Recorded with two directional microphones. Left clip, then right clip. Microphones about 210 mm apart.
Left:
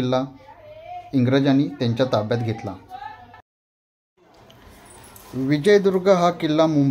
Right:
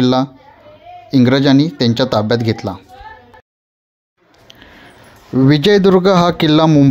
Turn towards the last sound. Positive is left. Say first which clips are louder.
# right 8 dB
turn(degrees=-40)  # may be behind; listen again after turning